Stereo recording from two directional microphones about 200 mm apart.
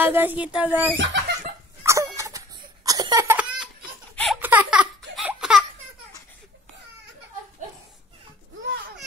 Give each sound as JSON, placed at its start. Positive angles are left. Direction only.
{"t": 0.0, "sound": "speech", "side_deg": -10}
{"t": 0.9, "sound": "speech", "side_deg": -60}
{"t": 1.8, "sound": "laughter", "side_deg": -15}
{"t": 4.1, "sound": "a sound", "side_deg": 5}
{"t": 4.4, "sound": "baby laughter", "side_deg": -10}